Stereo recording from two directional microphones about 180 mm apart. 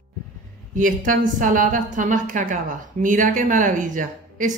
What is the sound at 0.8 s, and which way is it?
A woman's voice, 50° right (ahead or behind).